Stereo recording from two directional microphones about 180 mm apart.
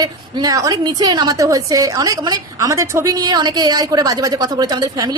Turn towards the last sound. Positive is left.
turn(degrees=-20)  # may be behind; listen again after turning